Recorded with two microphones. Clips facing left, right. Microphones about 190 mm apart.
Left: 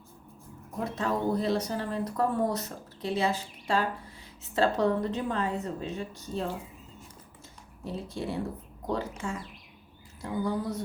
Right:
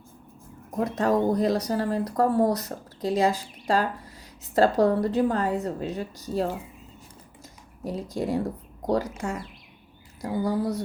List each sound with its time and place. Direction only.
0.8 s speech: 40° right (ahead or behind)
7.9 s speech: 40° right (ahead or behind)
10.2 s speech: 40° right (ahead or behind)